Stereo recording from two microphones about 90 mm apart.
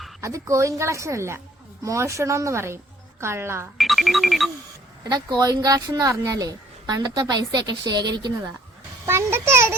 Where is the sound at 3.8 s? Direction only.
Centre (ahead or behind).